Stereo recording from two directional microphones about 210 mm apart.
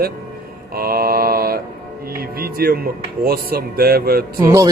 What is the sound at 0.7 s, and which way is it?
Mantra, 45° right (ahead or behind).